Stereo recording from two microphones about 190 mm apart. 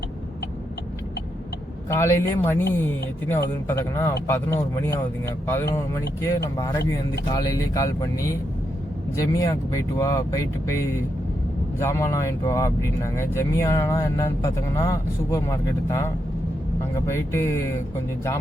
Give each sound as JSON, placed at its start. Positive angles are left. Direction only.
{"t": 1.9, "sound": "speech", "side_deg": 15}